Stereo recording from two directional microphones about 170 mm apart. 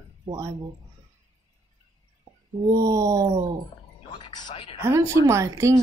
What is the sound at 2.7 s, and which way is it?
Speech, 20° right (ahead or behind).